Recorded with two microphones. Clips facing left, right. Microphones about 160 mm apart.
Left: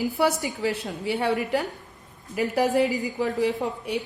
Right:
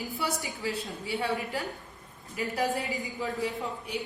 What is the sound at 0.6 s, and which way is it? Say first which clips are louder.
Speech: left 8 dB; 75° left (ahead or behind).